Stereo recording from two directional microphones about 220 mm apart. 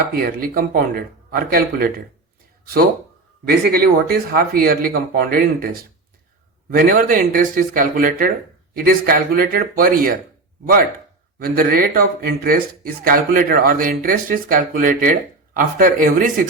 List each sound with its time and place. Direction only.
0.1 s speech: 40° right (ahead or behind)
3.4 s speech: 45° right (ahead or behind)
11.3 s speech: 40° right (ahead or behind)